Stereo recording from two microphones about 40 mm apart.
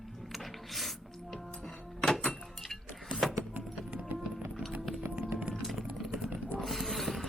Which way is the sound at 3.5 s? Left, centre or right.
Right.